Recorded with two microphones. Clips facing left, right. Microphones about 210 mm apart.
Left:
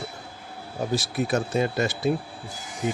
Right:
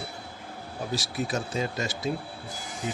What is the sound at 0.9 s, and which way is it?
Speech, 55° left (ahead or behind).